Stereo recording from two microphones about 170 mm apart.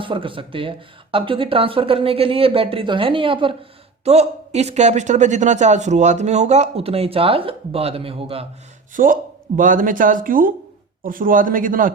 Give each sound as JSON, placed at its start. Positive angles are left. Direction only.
{"t": 0.0, "sound": "speech", "side_deg": -30}
{"t": 8.9, "sound": "speech", "side_deg": -50}